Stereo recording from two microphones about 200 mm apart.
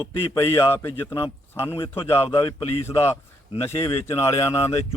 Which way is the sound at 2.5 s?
30° left (ahead or behind).